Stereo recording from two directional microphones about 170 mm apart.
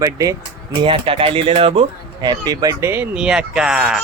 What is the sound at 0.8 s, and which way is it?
Speech, 30° right (ahead or behind).